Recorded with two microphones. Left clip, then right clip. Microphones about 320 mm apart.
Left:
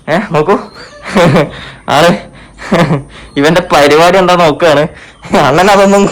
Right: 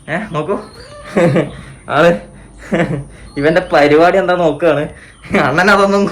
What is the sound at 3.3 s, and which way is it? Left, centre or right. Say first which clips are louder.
Speech: left 4 dB; left.